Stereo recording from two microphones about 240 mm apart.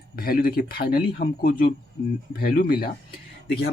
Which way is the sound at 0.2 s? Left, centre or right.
Left.